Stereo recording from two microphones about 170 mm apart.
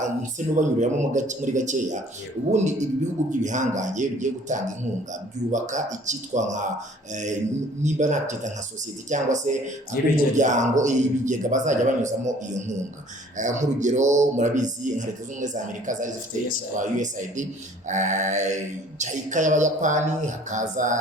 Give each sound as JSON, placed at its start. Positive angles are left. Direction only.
{"t": 0.0, "sound": "speech", "side_deg": -45}